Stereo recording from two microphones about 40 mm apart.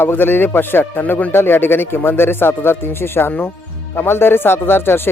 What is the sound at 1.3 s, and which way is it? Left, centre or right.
Speech, left.